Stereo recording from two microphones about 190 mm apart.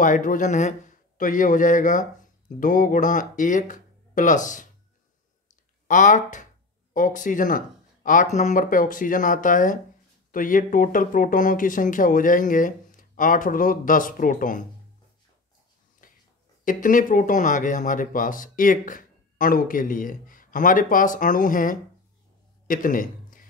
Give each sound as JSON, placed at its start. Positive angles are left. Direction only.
{"t": 0.0, "sound": "speech", "side_deg": 45}
{"t": 5.9, "sound": "speech", "side_deg": 40}
{"t": 16.0, "sound": "a sound", "side_deg": 45}
{"t": 16.6, "sound": "a man's voice", "side_deg": 45}